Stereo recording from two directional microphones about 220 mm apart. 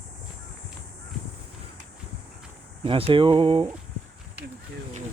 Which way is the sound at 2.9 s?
25° right (ahead or behind).